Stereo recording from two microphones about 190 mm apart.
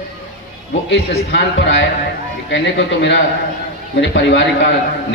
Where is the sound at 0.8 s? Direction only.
70° left (ahead or behind).